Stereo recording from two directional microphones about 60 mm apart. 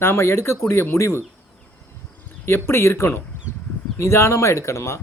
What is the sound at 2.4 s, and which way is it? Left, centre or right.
Speech, left.